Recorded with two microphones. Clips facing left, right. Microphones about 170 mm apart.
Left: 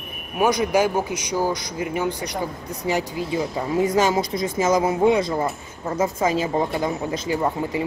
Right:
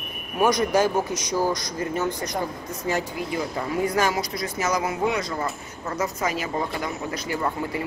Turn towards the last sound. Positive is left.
turn(degrees=20)  # may be behind; listen again after turning